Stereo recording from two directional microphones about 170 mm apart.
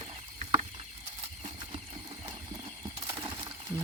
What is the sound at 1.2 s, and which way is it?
Horse, 30° right (ahead or behind).